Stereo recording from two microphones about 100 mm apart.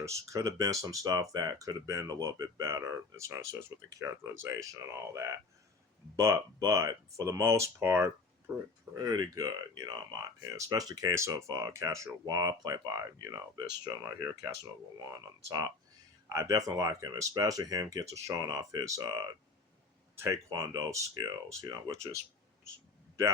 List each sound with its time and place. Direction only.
0.0 s speech: 30° right (ahead or behind)
9.0 s speech: 40° right (ahead or behind)
11.1 s speech: 30° right (ahead or behind)
12.2 s speech: 45° right (ahead or behind)
16.3 s speech: 35° right (ahead or behind)
20.5 s speech: 40° right (ahead or behind)